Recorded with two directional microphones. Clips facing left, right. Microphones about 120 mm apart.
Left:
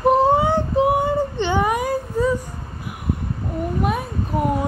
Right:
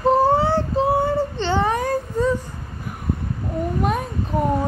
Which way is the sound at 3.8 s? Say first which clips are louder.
Even; 5° left (ahead or behind).